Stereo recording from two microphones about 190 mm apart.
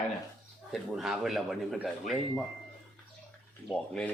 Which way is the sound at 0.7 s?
Centre (ahead or behind).